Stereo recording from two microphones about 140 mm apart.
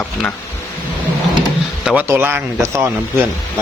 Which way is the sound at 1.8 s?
15° right (ahead or behind).